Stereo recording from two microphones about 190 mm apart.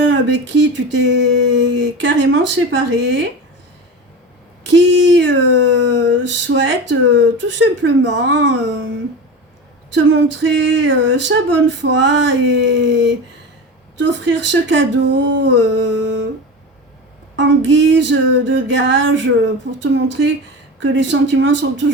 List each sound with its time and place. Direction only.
0.1 s speech: 75° right (ahead or behind)
4.6 s speech: 75° right (ahead or behind)
9.9 s speech: 75° right (ahead or behind)
17.3 s speech: 75° right (ahead or behind)